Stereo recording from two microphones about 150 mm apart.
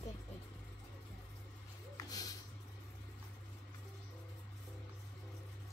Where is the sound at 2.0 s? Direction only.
25° left (ahead or behind).